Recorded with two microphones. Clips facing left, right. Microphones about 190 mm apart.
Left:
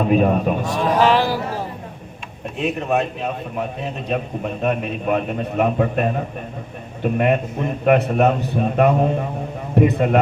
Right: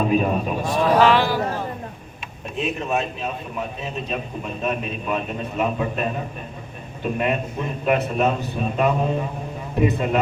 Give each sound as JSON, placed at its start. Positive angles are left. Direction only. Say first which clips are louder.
{"t": 0.1, "sound": "a man's voice", "louder": "left 4 dB", "side_deg": 60}
{"t": 0.6, "sound": "speech", "louder": "right 4 dB", "side_deg": 40}
{"t": 2.6, "sound": "a man's voice", "louder": "left 3 dB", "side_deg": 60}